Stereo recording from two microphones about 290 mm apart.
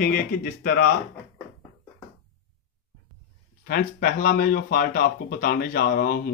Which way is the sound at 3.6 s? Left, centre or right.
Left.